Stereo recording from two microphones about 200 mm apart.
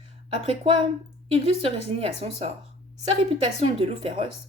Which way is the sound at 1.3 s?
30° right (ahead or behind).